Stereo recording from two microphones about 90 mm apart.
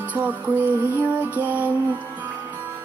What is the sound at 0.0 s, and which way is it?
Music, 20° right (ahead or behind).